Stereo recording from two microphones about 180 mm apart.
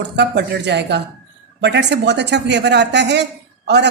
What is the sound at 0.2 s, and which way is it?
A woman's voice, 70° right (ahead or behind).